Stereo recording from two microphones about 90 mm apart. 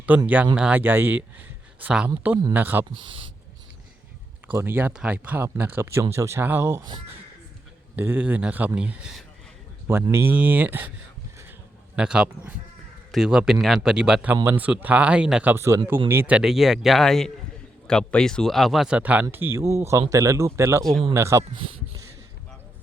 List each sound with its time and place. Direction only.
0.1 s speech: 20° right (ahead or behind)
0.8 s speech: 25° right (ahead or behind)
2.9 s speech: 75° right (ahead or behind)
4.5 s speech: 25° right (ahead or behind)
7.9 s speech: 20° right (ahead or behind)
9.8 s speech: 30° right (ahead or behind)
11.9 s speech: 10° right (ahead or behind)
15.5 s speech: 30° right (ahead or behind)
16.4 s speech: 5° right (ahead or behind)
18.9 s speech: 15° right (ahead or behind); by 21.4 s 30° right (ahead or behind)
21.5 s speech: 75° right (ahead or behind)